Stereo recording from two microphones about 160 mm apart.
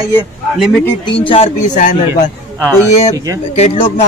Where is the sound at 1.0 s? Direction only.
35° left (ahead or behind).